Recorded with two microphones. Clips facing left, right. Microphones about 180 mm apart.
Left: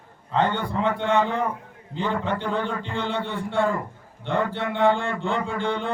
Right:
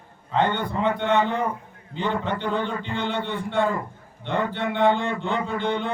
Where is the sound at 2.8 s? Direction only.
35° left (ahead or behind).